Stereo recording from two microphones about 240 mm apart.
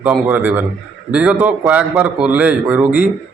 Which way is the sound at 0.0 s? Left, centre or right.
Centre.